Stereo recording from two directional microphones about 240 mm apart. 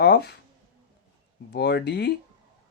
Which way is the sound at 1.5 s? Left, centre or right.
Left.